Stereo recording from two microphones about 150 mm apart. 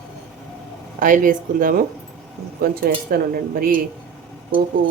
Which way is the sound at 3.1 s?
75° right (ahead or behind).